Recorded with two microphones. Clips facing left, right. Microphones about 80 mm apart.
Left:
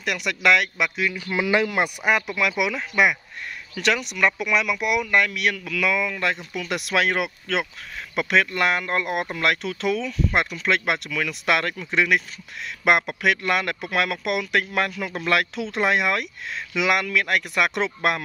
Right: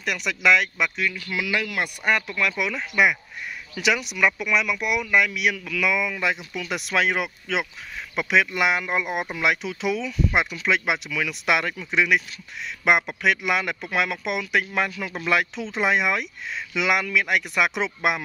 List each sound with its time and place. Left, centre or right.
0.0 s speech: centre
1.3 s speech: left
2.0 s speech: centre